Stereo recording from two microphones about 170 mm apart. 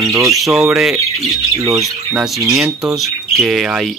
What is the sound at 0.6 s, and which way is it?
Speech, centre (ahead or behind).